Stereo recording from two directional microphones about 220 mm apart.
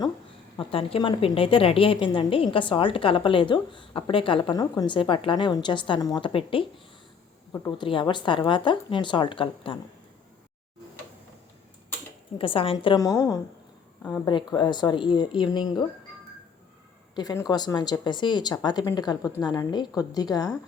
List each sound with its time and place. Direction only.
0.5 s a woman's voice: 25° left (ahead or behind)
7.5 s a woman's voice: 10° left (ahead or behind)
12.4 s a woman's voice: 25° left (ahead or behind)
17.2 s a woman's voice: 15° left (ahead or behind)